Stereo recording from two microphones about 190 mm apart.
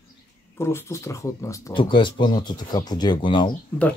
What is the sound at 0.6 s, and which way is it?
Speech, 15° left (ahead or behind).